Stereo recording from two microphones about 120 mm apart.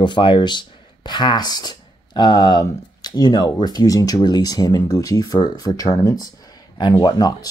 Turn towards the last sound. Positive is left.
turn(degrees=35)  # may be behind; listen again after turning